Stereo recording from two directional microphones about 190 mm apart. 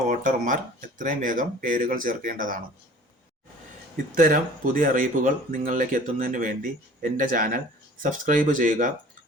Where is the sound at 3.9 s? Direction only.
45° right (ahead or behind).